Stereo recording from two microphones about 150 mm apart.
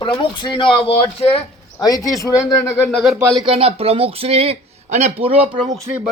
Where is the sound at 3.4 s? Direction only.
40° right (ahead or behind).